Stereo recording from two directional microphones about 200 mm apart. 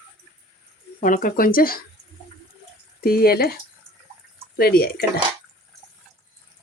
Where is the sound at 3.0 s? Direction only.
50° left (ahead or behind).